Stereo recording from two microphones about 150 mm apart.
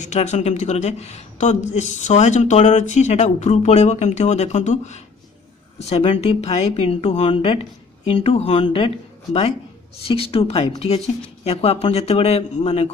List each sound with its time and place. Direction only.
0.0 s a woman's voice: 50° left (ahead or behind)